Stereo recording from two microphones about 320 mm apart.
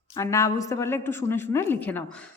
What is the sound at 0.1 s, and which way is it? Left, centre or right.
A woman's voice, centre.